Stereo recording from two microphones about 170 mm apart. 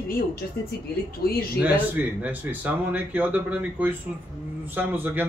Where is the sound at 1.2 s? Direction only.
65° left (ahead or behind).